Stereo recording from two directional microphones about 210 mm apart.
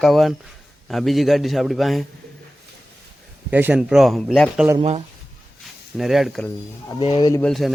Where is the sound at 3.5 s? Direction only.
10° right (ahead or behind).